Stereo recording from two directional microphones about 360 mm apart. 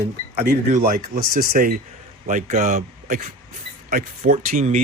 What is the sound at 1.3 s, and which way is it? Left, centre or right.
Speech, right.